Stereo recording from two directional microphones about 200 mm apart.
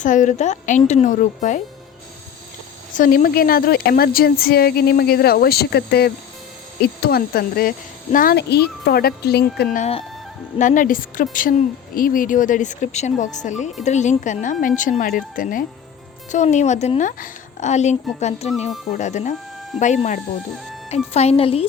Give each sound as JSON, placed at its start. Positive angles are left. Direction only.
{"t": 0.0, "sound": "a woman's voice", "side_deg": 40}
{"t": 3.0, "sound": "a woman's voice", "side_deg": 45}
{"t": 9.7, "sound": "a woman's voice", "side_deg": 35}